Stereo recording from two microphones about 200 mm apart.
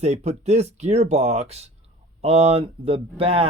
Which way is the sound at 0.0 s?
35° right (ahead or behind).